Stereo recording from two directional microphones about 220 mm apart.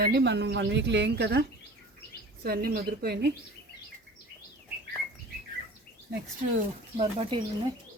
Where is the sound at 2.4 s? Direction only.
45° right (ahead or behind).